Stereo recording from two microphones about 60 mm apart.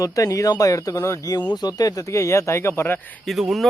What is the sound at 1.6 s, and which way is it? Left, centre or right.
Speech, left.